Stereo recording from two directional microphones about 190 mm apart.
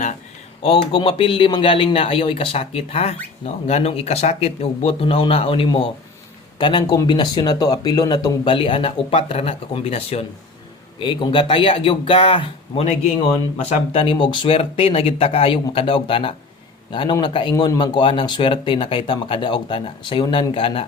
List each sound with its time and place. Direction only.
0.6 s speech: 30° left (ahead or behind)